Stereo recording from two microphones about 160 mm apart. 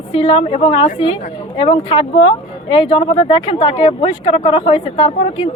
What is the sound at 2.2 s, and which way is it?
Speech, 35° left (ahead or behind).